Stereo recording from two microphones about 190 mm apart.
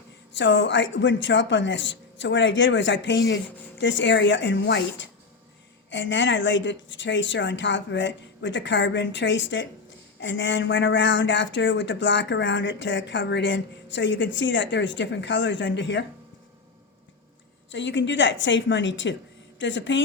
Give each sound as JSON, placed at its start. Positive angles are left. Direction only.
{"t": 0.3, "sound": "speech", "side_deg": 70}
{"t": 17.7, "sound": "speech", "side_deg": 75}